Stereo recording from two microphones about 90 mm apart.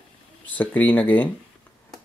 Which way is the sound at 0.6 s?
20° left (ahead or behind).